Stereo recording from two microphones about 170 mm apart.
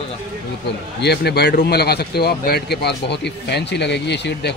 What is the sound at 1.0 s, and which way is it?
Speech, 70° left (ahead or behind).